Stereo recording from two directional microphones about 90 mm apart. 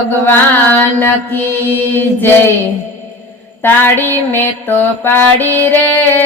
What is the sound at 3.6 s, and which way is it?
Mantra, 20° left (ahead or behind).